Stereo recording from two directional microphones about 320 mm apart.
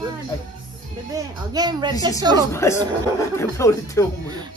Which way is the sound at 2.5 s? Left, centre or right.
Centre.